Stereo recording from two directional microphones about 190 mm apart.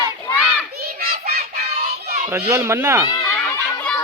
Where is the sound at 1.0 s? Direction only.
55° right (ahead or behind).